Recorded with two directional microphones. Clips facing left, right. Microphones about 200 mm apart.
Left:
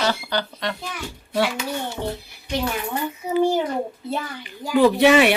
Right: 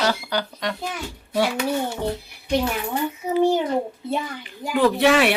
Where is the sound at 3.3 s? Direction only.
Centre (ahead or behind).